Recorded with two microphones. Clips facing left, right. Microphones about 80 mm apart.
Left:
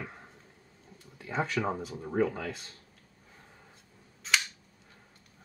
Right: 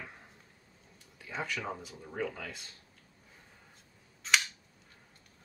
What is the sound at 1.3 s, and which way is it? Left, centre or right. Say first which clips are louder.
Speech: left 7 dB; left.